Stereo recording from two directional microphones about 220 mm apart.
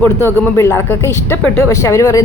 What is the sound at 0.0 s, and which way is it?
A woman's voice, 10° left (ahead or behind).